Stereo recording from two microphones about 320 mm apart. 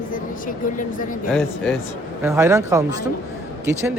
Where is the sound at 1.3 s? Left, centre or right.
Centre.